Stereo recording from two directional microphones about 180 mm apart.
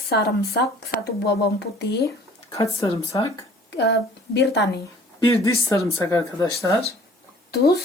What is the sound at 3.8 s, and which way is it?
Speech, 75° left (ahead or behind).